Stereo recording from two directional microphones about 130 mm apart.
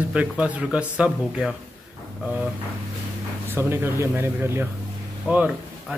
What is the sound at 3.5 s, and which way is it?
Speech, 15° right (ahead or behind).